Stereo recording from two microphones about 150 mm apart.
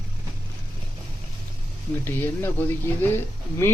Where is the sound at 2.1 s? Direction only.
15° left (ahead or behind).